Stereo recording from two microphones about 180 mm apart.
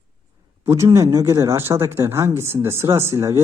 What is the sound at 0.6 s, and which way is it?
A man's voice, 15° right (ahead or behind).